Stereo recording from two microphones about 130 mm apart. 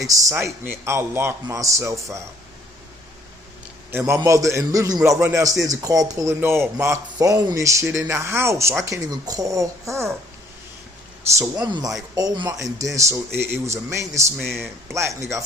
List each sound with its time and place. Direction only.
0.1 s speech: 25° right (ahead or behind)
0.3 s speech: 15° right (ahead or behind)
3.9 s speech: 20° right (ahead or behind)
11.3 s speech: 30° right (ahead or behind)
14.3 s speech: 5° left (ahead or behind)